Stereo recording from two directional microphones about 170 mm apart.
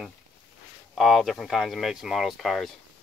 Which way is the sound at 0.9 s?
Centre (ahead or behind).